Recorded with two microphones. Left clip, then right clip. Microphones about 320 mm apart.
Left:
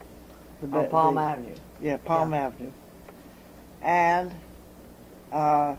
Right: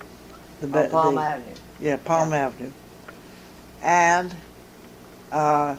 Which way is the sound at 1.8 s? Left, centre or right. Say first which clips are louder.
Right 4 dB; right.